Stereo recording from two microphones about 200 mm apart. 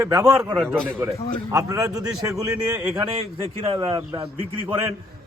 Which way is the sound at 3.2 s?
30° right (ahead or behind).